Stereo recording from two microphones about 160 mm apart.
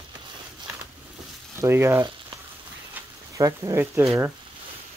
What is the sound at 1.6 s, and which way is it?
Speech, 15° right (ahead or behind).